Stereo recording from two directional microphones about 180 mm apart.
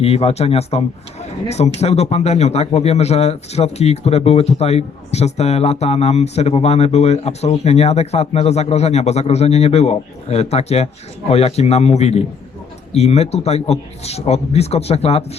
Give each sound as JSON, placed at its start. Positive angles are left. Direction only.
{"t": 0.0, "sound": "speech", "side_deg": 35}